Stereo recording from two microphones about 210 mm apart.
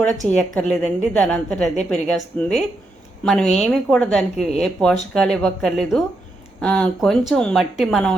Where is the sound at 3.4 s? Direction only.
30° left (ahead or behind).